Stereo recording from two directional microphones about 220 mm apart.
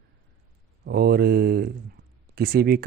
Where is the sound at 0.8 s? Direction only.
45° right (ahead or behind).